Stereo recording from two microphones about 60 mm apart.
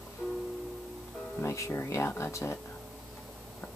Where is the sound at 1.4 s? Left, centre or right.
Left.